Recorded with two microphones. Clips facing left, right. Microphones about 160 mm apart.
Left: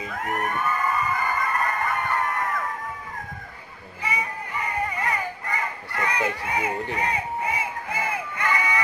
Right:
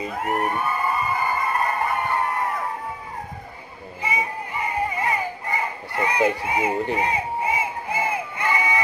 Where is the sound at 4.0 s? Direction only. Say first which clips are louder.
Right 3 dB; 20° right (ahead or behind).